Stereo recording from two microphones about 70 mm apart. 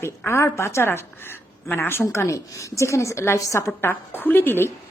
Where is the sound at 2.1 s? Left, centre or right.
Left.